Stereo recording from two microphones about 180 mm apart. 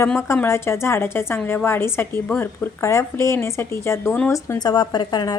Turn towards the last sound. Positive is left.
turn(degrees=25)  # may be behind; listen again after turning